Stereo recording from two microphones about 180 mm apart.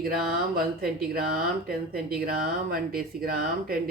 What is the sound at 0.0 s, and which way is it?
Speech, 55° right (ahead or behind).